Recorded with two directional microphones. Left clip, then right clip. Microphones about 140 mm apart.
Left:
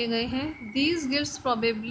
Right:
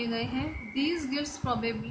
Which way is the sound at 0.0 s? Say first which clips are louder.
Left 4 dB; 60° left (ahead or behind).